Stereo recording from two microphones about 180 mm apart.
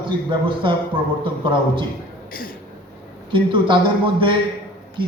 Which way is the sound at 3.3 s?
30° right (ahead or behind).